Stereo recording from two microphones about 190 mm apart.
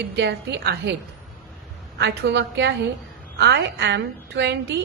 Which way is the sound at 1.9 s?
65° right (ahead or behind).